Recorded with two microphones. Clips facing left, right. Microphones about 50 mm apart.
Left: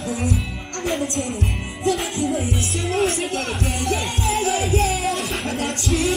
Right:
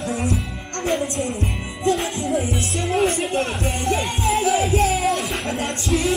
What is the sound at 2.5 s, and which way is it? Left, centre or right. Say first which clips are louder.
Speech: right 1 dB; centre.